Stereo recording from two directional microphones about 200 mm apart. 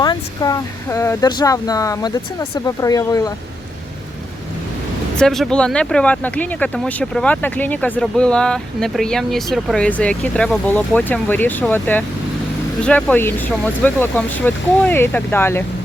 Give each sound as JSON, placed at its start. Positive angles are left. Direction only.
{"t": 0.0, "sound": "speech", "side_deg": 20}
{"t": 5.1, "sound": "speech", "side_deg": 0}